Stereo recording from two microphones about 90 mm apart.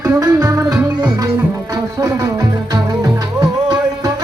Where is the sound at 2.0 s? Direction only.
40° right (ahead or behind).